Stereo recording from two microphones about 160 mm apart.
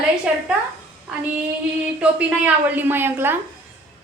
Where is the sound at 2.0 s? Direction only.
10° right (ahead or behind).